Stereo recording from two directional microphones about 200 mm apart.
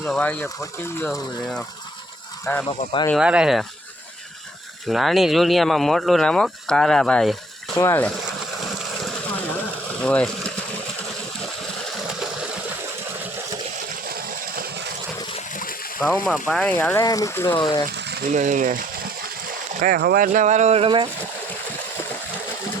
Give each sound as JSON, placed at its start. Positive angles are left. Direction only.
{"t": 0.0, "sound": "speech", "side_deg": 5}
{"t": 2.4, "sound": "speech", "side_deg": 10}
{"t": 2.6, "sound": "speech", "side_deg": 25}
{"t": 3.1, "sound": "speech", "side_deg": -5}
{"t": 4.9, "sound": "speech", "side_deg": 0}
{"t": 10.0, "sound": "speech", "side_deg": 5}
{"t": 12.2, "sound": "a sound", "side_deg": -5}
{"t": 14.1, "sound": "vehicle", "side_deg": -45}
{"t": 15.5, "sound": "a sound", "side_deg": 45}
{"t": 16.0, "sound": "speech", "side_deg": 5}
{"t": 17.9, "sound": "mechanisms", "side_deg": -60}
{"t": 18.3, "sound": "speech", "side_deg": -40}